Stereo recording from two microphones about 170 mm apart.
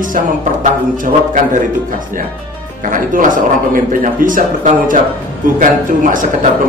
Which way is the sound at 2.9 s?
50° right (ahead or behind).